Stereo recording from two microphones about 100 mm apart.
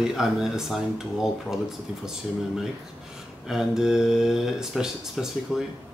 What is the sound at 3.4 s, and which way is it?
Speech, 5° right (ahead or behind).